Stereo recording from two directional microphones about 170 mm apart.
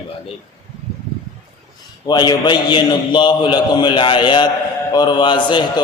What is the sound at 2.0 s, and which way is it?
A man's voice, 25° left (ahead or behind).